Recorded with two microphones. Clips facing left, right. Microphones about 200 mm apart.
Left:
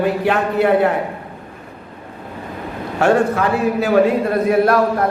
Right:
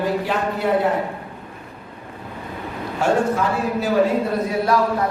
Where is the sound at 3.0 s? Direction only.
65° left (ahead or behind).